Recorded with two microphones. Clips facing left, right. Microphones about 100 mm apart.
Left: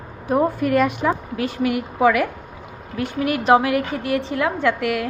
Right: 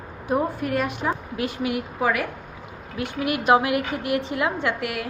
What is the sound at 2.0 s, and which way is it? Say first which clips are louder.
Speech: left 7 dB; 75° left (ahead or behind).